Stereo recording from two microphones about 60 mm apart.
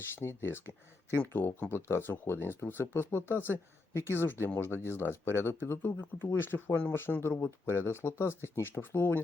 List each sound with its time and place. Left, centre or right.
0.3 s speech: left